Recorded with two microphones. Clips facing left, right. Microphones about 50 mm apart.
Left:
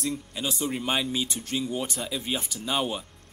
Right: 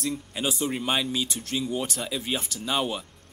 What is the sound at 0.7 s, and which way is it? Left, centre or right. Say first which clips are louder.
Speech: left 1 dB; centre.